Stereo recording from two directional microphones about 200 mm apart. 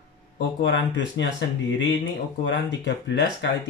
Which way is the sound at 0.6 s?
65° left (ahead or behind).